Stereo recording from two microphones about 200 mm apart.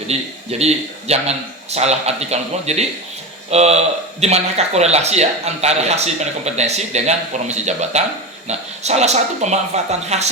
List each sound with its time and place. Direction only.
0.6 s speech: 30° right (ahead or behind)